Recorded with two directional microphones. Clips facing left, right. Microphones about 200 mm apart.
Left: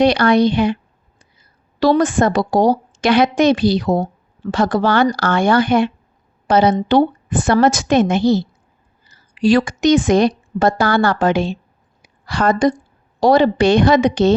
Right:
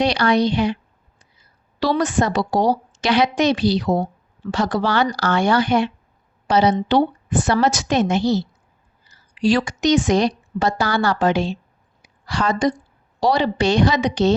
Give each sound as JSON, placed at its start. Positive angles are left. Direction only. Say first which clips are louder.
{"t": 0.0, "sound": "a woman's voice", "louder": "left 5 dB", "side_deg": 50}
{"t": 1.8, "sound": "a woman's voice", "louder": "left 5 dB", "side_deg": 50}